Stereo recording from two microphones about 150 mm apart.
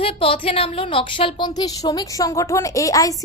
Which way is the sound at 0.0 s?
35° left (ahead or behind).